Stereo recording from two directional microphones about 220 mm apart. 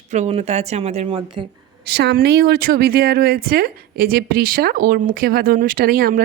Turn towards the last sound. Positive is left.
turn(degrees=-40)  # may be behind; listen again after turning